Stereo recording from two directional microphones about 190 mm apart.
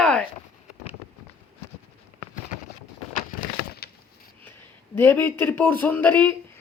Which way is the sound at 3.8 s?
55° left (ahead or behind).